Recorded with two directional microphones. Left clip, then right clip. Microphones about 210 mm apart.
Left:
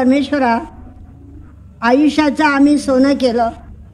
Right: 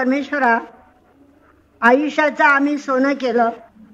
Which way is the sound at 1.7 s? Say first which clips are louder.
Left 1 dB; 60° left (ahead or behind).